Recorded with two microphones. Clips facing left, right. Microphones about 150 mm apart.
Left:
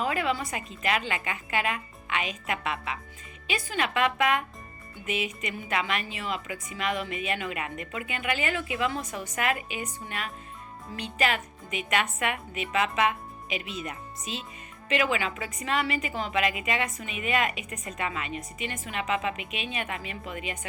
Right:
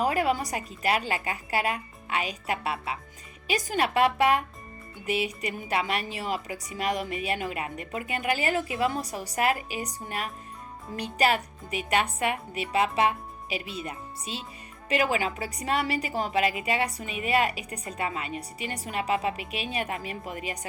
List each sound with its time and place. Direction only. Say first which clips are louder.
0.0 s a woman's voice: right 3 dB; 40° right (ahead or behind)